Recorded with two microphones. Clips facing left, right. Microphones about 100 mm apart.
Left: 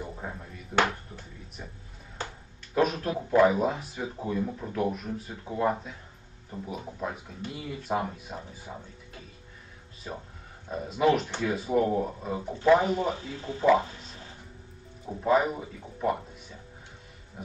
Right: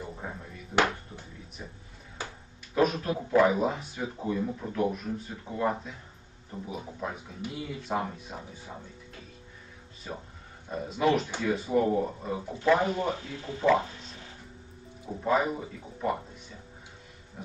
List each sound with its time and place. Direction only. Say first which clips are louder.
0.2 s speech: even; 5° right (ahead or behind)
0.7 s speech: even; 10° left (ahead or behind)
2.7 s speech: even; centre (ahead or behind)
10.7 s speech: left 2 dB; centre (ahead or behind)
13.3 s speech: left 2 dB; 25° left (ahead or behind)
15.0 s speech: left 2 dB; centre (ahead or behind)